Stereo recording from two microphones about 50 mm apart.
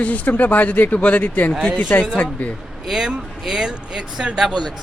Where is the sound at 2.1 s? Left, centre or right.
Left.